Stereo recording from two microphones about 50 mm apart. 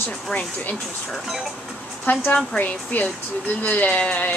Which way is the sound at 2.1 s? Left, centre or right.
Left.